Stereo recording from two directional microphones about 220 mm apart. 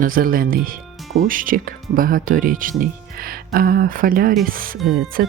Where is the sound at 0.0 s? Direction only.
40° right (ahead or behind).